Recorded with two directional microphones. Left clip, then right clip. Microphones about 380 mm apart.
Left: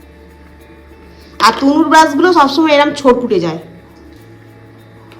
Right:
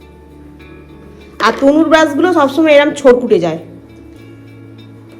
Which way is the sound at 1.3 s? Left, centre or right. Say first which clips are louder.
Even; centre.